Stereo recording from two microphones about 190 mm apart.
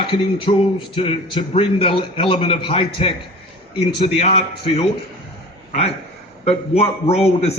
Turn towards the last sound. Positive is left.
turn(degrees=35)  # may be behind; listen again after turning